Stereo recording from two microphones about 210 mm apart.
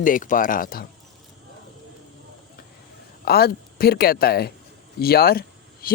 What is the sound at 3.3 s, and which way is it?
Speech, 45° left (ahead or behind).